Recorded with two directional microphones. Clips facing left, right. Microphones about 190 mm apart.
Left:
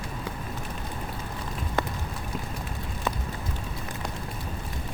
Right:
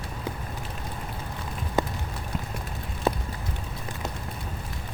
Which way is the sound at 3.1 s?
35° right (ahead or behind).